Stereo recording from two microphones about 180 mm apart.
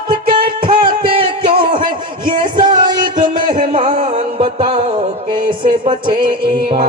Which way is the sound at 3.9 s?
40° right (ahead or behind).